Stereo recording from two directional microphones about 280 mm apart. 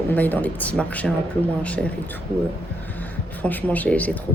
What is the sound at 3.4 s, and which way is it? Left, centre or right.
Speech, centre.